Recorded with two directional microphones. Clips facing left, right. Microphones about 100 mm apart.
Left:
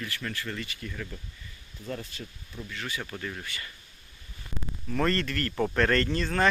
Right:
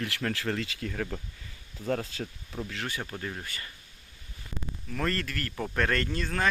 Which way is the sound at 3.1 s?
25° right (ahead or behind).